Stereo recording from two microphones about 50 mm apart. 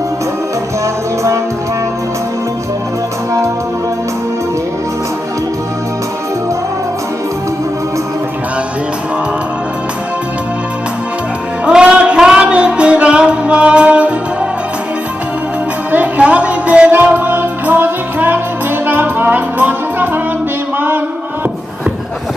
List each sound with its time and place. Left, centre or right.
11.6 s music: centre
16.2 s music: right
16.9 s music: right